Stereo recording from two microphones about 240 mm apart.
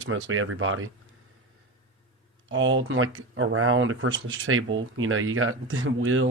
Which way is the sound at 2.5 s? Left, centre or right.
Right.